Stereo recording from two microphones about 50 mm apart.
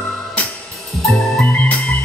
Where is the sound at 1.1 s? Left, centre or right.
Centre.